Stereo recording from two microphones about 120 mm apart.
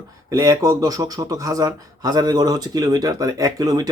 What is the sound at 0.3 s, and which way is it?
Speech, 30° right (ahead or behind).